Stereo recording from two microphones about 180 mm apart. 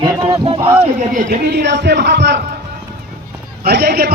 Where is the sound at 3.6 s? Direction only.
60° right (ahead or behind).